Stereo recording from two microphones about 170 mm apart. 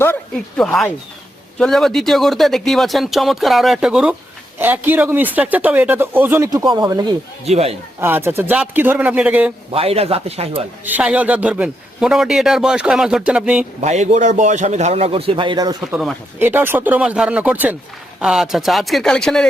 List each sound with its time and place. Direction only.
0.0 s a man's voice: 10° left (ahead or behind); by 7.1 s 25° right (ahead or behind)
7.4 s a man's voice: 40° right (ahead or behind)
8.0 s a man's voice: 15° right (ahead or behind)
9.7 s a man's voice: 35° right (ahead or behind)
10.8 s a man's voice: 10° right (ahead or behind)
13.8 s a man's voice: 40° right (ahead or behind); by 15.7 s 25° right (ahead or behind)
15.9 s a man's voice: 5° right (ahead or behind)